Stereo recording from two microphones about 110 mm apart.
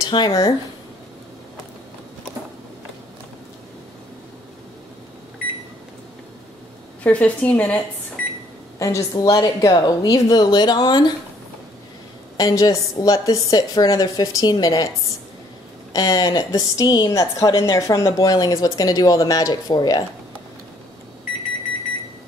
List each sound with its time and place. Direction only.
0.0 s speech: 40° left (ahead or behind)
7.0 s a woman's voice: 10° left (ahead or behind)
8.7 s speech: 30° left (ahead or behind)
12.4 s speech: 35° left (ahead or behind)
15.9 s speech: 35° left (ahead or behind)